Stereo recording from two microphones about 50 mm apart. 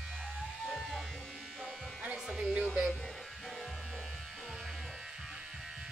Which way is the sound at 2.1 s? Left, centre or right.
Centre.